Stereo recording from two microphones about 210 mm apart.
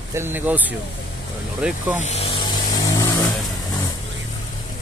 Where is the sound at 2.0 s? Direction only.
30° left (ahead or behind).